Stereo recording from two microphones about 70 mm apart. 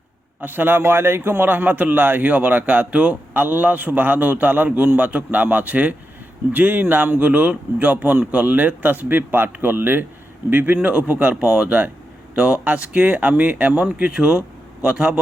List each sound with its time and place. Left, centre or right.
0.4 s a man's voice: right; by 15.2 s centre